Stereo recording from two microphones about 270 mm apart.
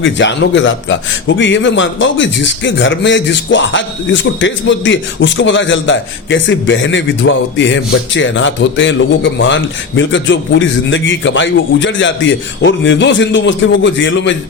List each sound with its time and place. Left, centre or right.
0.0 s a man's voice: left